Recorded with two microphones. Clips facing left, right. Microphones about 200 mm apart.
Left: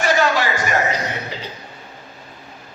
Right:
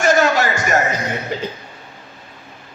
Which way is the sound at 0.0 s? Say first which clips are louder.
Right 3 dB; 45° right (ahead or behind).